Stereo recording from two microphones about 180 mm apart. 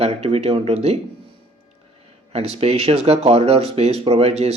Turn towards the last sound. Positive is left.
turn(degrees=-35)  # may be behind; listen again after turning